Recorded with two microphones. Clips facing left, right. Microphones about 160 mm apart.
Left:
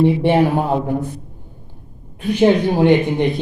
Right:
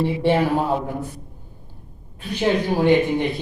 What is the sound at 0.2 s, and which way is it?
Speech, 15° left (ahead or behind).